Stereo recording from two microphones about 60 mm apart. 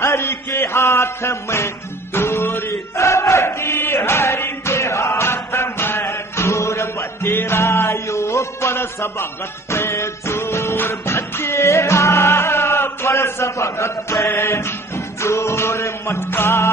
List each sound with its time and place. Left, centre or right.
0.0 s music: left
2.1 s chant: left
14.2 s music: left